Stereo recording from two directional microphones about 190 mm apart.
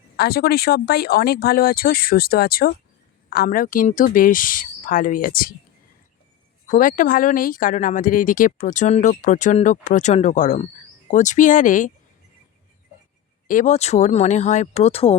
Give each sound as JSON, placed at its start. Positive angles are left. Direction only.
{"t": 0.2, "sound": "speech", "side_deg": 55}
{"t": 6.7, "sound": "speech", "side_deg": 45}
{"t": 13.5, "sound": "speech", "side_deg": 40}